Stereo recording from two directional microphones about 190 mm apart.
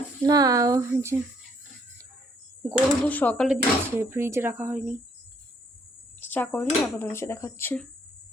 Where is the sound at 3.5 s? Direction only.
10° right (ahead or behind).